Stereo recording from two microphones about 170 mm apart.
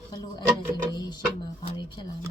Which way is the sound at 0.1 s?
25° left (ahead or behind).